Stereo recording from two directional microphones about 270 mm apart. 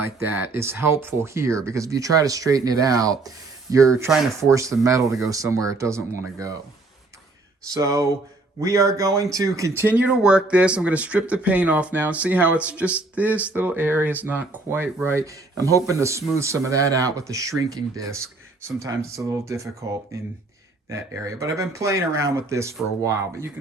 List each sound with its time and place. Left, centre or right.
0.2 s speech: centre
7.7 s speech: centre